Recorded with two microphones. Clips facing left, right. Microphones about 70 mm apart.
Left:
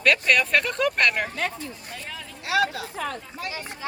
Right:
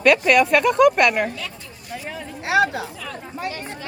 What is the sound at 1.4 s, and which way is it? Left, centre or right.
Speech, left.